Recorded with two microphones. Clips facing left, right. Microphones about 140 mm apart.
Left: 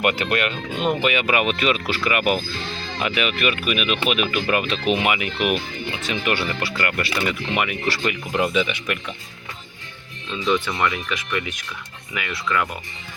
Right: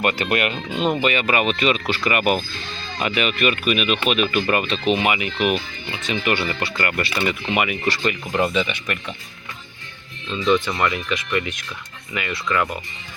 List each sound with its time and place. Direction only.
0.0 s speech: 10° left (ahead or behind)
0.3 s speech: 5° right (ahead or behind)
2.5 s speech: 90° left
3.2 s speech: 5° left (ahead or behind)
7.9 s speech: 5° left (ahead or behind)
10.2 s speech: centre (ahead or behind)